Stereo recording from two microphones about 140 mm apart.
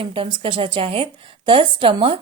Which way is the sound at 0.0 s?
40° right (ahead or behind).